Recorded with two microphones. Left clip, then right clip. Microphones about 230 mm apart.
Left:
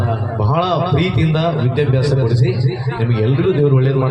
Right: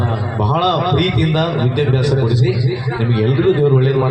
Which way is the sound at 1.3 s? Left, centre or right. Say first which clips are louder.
Even; right.